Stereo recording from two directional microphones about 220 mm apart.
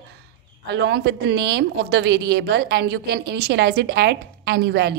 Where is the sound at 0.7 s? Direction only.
50° right (ahead or behind).